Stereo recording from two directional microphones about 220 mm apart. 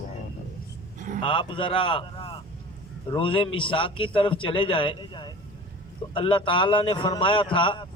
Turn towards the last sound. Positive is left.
turn(degrees=20)  # may be behind; listen again after turning